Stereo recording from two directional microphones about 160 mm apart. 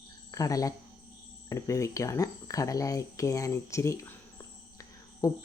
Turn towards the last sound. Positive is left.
turn(degrees=20)  # may be behind; listen again after turning